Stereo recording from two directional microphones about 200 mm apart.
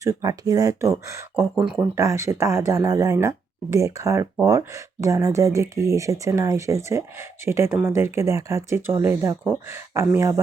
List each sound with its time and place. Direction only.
0.0 s speech: 20° right (ahead or behind)